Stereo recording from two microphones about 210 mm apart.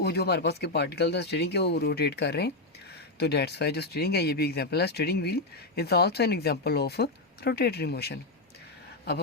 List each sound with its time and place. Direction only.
0.0 s speech: 50° left (ahead or behind)